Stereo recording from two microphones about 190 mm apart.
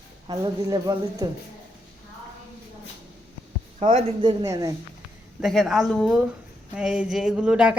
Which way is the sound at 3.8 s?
25° right (ahead or behind).